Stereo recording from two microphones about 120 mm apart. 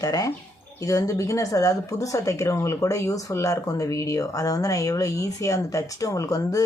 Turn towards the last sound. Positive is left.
turn(degrees=30)  # may be behind; listen again after turning